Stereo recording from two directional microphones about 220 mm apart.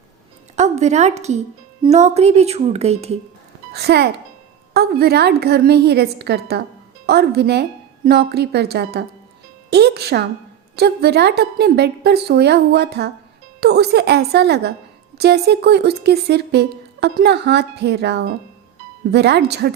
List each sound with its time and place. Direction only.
0.5 s a woman's voice: 30° right (ahead or behind)
3.7 s a child's voice: 45° right (ahead or behind)